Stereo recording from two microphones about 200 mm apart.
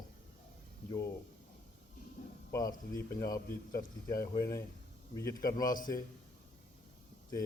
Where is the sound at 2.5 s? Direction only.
15° left (ahead or behind).